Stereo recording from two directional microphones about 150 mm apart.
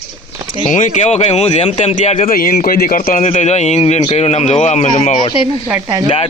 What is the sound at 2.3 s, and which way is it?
A man's voice, 70° left (ahead or behind).